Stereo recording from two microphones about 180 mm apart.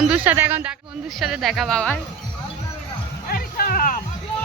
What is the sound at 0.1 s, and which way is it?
Speech, 10° right (ahead or behind).